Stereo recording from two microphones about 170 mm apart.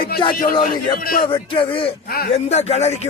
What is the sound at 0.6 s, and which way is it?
Speech, 55° left (ahead or behind).